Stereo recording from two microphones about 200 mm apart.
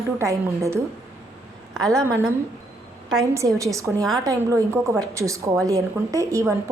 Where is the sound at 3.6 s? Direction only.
15° right (ahead or behind).